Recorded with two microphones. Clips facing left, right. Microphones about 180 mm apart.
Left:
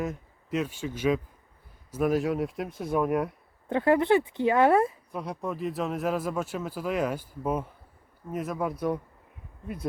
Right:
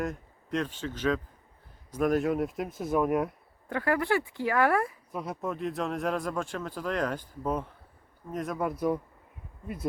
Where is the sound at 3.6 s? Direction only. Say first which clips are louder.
Left 5 dB; 25° left (ahead or behind).